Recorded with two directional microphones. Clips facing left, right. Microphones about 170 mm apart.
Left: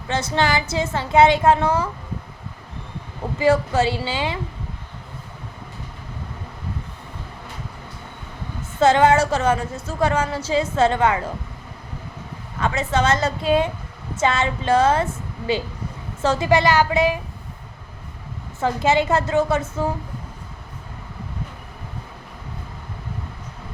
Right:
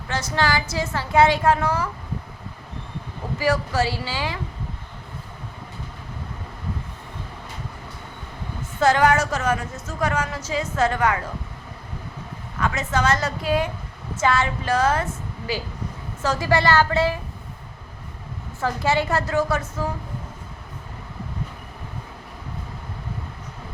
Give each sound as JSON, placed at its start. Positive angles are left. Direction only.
{"t": 0.1, "sound": "a woman's voice", "side_deg": 25}
{"t": 3.3, "sound": "a woman's voice", "side_deg": 25}
{"t": 8.8, "sound": "a woman's voice", "side_deg": 25}
{"t": 12.5, "sound": "a woman's voice", "side_deg": 25}
{"t": 18.6, "sound": "a woman's voice", "side_deg": 20}